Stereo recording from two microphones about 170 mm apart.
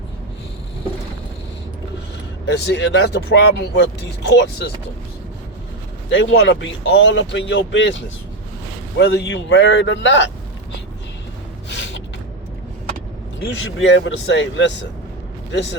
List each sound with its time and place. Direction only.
2.5 s speech: 90° left
6.1 s speech: 90° left
13.4 s speech: 90° left